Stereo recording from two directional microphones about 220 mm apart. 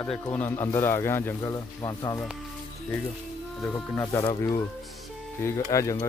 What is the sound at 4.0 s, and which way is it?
Speech, 20° left (ahead or behind).